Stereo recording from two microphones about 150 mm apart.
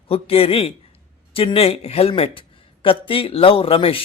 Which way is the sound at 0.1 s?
40° left (ahead or behind).